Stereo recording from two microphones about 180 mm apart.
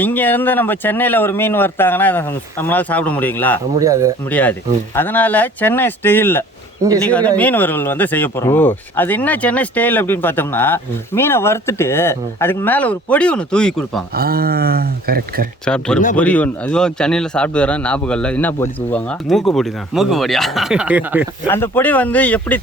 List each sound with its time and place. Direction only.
0.0 s speech: 10° left (ahead or behind)
3.8 s speech: 20° right (ahead or behind)
4.3 s speech: 10° left (ahead or behind)
14.1 s speech: 55° right (ahead or behind)
15.6 s a man's voice: 5° left (ahead or behind)
21.4 s speech: 10° left (ahead or behind)